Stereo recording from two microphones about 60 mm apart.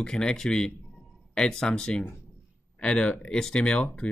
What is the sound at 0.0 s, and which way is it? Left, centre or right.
Speech, centre.